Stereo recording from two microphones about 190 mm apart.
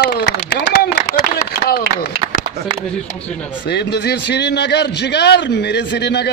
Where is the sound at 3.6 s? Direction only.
60° left (ahead or behind).